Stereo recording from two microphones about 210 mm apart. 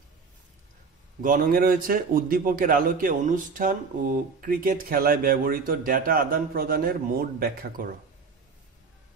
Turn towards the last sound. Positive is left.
turn(degrees=-45)  # may be behind; listen again after turning